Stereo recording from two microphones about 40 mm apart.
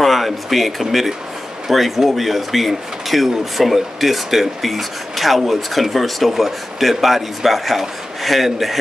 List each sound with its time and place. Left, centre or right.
0.0 s speech: centre